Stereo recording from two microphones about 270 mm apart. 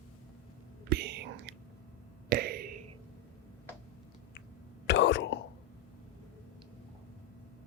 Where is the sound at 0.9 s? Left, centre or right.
Right.